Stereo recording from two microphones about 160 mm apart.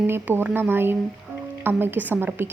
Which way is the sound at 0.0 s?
10° right (ahead or behind).